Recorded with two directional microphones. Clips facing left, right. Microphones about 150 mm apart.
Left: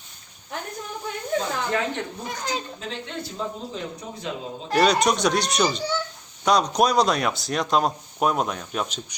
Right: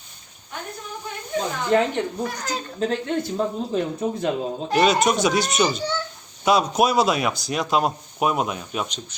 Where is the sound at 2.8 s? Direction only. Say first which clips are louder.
Right 10 dB; 50° right (ahead or behind).